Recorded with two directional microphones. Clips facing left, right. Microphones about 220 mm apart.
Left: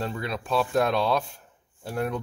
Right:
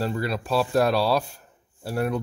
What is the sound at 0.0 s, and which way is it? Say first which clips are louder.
Speech: right 4 dB; 5° right (ahead or behind).